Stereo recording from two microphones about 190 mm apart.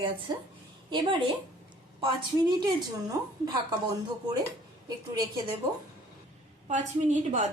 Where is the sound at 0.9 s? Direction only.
25° right (ahead or behind).